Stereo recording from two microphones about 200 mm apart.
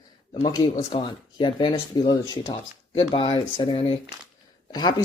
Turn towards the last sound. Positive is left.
turn(degrees=20)  # may be behind; listen again after turning